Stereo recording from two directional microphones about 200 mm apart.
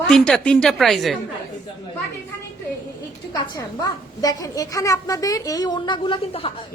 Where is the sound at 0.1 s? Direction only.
5° left (ahead or behind).